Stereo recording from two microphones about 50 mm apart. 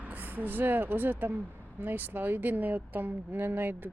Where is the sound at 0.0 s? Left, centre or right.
Right.